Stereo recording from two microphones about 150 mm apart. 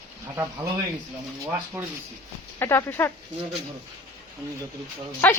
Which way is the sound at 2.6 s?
15° left (ahead or behind).